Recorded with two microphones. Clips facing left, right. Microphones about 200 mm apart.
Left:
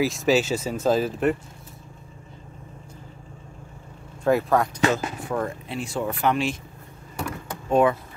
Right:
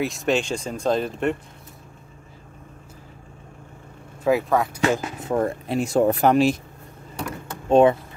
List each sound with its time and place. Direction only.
0.0 s speech: centre (ahead or behind)
4.2 s speech: centre (ahead or behind)
4.9 s speech: 25° right (ahead or behind)
5.7 s speech: 45° right (ahead or behind)
7.7 s speech: 25° right (ahead or behind)